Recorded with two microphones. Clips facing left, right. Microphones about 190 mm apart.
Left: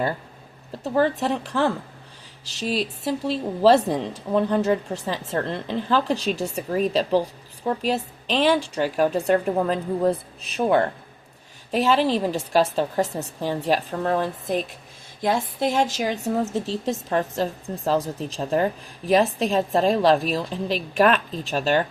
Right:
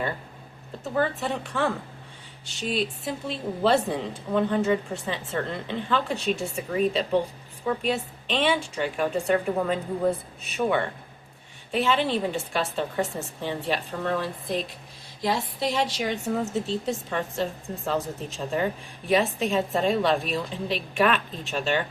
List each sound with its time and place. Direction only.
0.9 s a woman's voice: 35° left (ahead or behind)